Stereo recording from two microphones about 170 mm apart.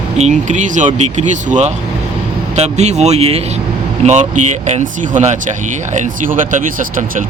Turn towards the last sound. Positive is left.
turn(degrees=-50)  # may be behind; listen again after turning